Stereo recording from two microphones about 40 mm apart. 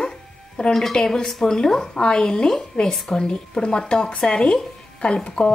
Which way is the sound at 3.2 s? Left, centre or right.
Left.